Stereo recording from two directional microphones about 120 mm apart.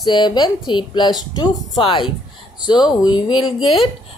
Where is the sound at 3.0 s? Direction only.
40° left (ahead or behind).